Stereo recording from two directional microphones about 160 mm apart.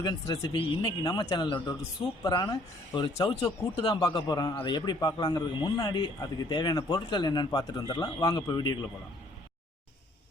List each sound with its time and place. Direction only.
0.0 s a man's voice: 25° left (ahead or behind)